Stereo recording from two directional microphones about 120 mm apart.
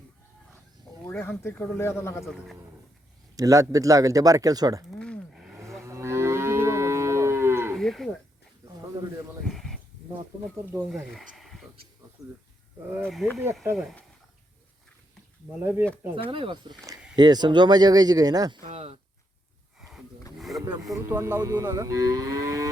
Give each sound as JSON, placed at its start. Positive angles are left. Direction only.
{"t": 1.2, "sound": "speech", "side_deg": 20}
{"t": 3.3, "sound": "moo", "side_deg": -25}
{"t": 4.9, "sound": "a sound", "side_deg": 10}
{"t": 5.3, "sound": "cattle", "side_deg": -5}
{"t": 5.8, "sound": "livestock", "side_deg": -25}
{"t": 7.8, "sound": "livestock", "side_deg": 0}
{"t": 8.6, "sound": "a sound", "side_deg": -25}
{"t": 9.4, "sound": "a sound", "side_deg": 0}
{"t": 10.8, "sound": "speech", "side_deg": 0}
{"t": 13.6, "sound": "moo", "side_deg": -20}
{"t": 15.4, "sound": "speech", "side_deg": -15}
{"t": 16.1, "sound": "speech", "side_deg": -45}
{"t": 18.7, "sound": "speech", "side_deg": -50}
{"t": 20.9, "sound": "moo", "side_deg": -20}